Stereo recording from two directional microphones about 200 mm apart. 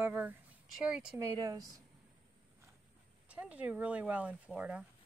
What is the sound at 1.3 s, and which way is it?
Speech, 20° right (ahead or behind).